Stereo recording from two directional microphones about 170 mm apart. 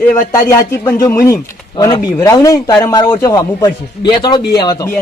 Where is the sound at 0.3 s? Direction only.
20° left (ahead or behind).